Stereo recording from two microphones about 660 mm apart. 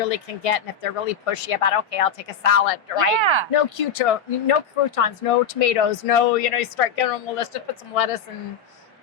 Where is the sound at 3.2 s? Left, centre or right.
Right.